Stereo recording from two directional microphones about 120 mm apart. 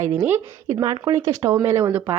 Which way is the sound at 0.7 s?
35° right (ahead or behind).